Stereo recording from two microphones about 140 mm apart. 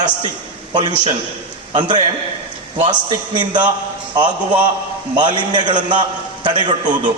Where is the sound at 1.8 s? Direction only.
35° right (ahead or behind).